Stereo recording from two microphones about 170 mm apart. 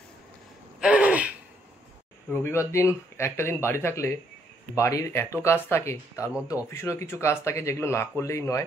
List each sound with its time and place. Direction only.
0.7 s gasp: 5° right (ahead or behind)
2.3 s speech: 15° left (ahead or behind)